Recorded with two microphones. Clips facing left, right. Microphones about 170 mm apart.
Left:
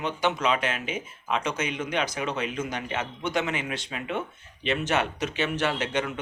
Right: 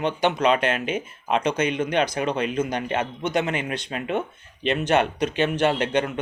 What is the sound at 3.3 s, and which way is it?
Speech, 55° right (ahead or behind).